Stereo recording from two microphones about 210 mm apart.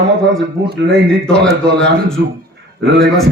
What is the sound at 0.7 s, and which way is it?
Speech, 50° right (ahead or behind).